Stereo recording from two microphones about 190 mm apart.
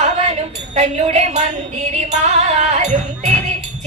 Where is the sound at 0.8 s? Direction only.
35° right (ahead or behind).